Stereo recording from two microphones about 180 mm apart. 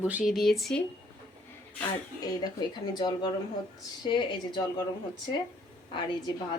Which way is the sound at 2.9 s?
25° left (ahead or behind).